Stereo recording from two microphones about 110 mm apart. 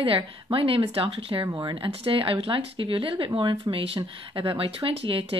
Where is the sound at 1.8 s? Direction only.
55° right (ahead or behind).